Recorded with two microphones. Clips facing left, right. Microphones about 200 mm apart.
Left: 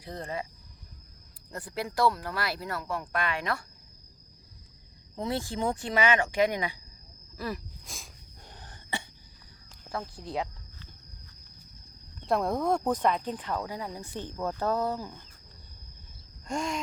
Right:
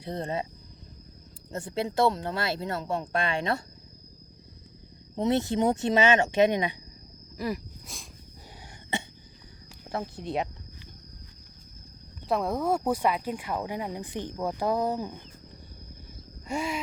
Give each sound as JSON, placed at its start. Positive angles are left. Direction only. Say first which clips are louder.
{"t": 0.0, "sound": "speech", "louder": "right 5 dB", "side_deg": -25}
{"t": 1.5, "sound": "speech", "louder": "right 5 dB", "side_deg": -25}
{"t": 5.1, "sound": "speech", "louder": "right 7 dB", "side_deg": -20}
{"t": 7.9, "sound": "a sound", "louder": "even", "side_deg": 0}
{"t": 8.9, "sound": "a sound", "louder": "right 4 dB", "side_deg": -20}
{"t": 10.2, "sound": "speech", "louder": "right 3 dB", "side_deg": -20}
{"t": 12.2, "sound": "speech", "louder": "even", "side_deg": 0}
{"t": 16.5, "sound": "speech", "louder": "right 1 dB", "side_deg": -5}